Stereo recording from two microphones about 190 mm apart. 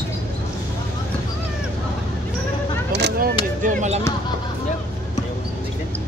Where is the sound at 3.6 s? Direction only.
35° right (ahead or behind).